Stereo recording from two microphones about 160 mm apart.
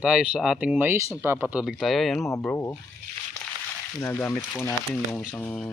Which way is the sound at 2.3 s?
15° left (ahead or behind).